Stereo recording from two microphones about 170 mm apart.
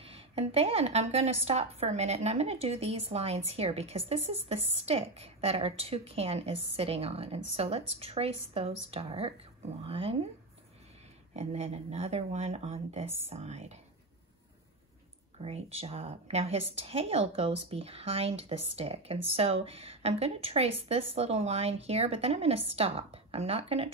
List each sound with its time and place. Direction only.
0.1 s speech: 35° right (ahead or behind)
11.3 s speech: 35° right (ahead or behind)
15.3 s speech: 35° right (ahead or behind)